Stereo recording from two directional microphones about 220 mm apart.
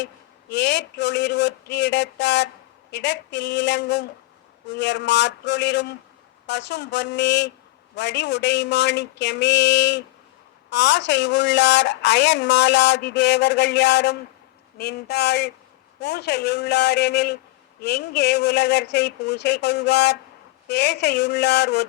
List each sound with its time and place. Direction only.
0.5 s a woman's voice: 50° left (ahead or behind)